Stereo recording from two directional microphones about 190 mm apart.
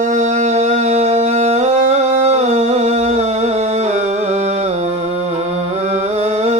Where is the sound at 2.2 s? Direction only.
35° right (ahead or behind).